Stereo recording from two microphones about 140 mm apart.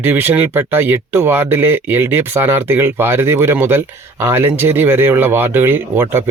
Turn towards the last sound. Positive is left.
turn(degrees=-15)  # may be behind; listen again after turning